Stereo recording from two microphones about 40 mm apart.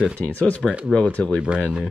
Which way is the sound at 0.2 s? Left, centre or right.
Left.